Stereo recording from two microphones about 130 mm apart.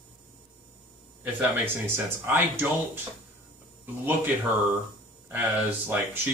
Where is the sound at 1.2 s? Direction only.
15° right (ahead or behind).